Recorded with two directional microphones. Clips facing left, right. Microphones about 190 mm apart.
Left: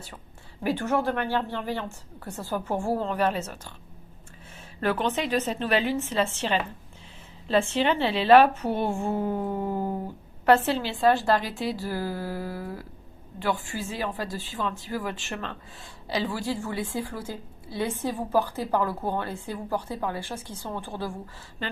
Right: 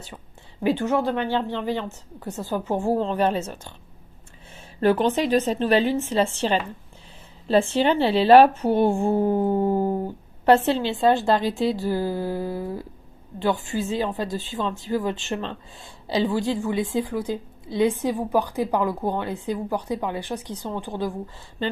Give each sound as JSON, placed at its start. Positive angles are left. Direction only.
{"t": 0.6, "sound": "a woman's voice", "side_deg": -15}
{"t": 4.8, "sound": "a woman's voice", "side_deg": -35}